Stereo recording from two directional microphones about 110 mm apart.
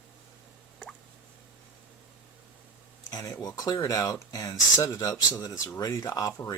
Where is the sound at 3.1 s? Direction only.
30° left (ahead or behind).